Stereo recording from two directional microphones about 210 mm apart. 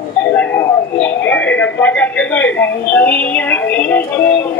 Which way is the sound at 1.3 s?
10° left (ahead or behind).